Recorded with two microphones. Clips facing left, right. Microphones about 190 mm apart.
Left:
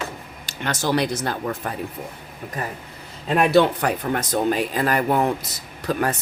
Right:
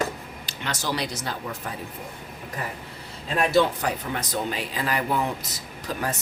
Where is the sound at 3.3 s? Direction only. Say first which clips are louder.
Left 4 dB; 60° left (ahead or behind).